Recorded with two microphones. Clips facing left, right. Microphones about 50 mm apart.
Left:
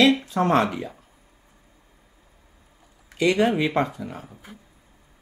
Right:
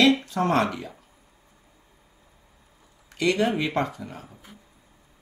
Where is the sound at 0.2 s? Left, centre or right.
Left.